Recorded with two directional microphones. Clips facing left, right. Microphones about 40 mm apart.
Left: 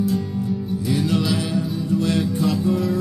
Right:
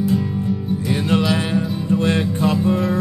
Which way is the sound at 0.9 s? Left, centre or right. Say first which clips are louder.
Right 3 dB; right.